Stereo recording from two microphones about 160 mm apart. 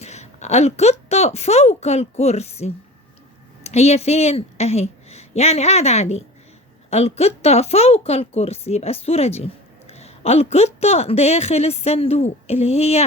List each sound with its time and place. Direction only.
0.0 s a woman's voice: 45° left (ahead or behind)